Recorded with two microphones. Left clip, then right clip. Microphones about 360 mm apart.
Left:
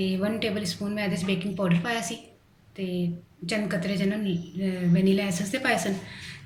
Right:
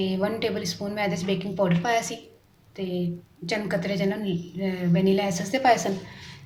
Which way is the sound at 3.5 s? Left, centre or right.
Right.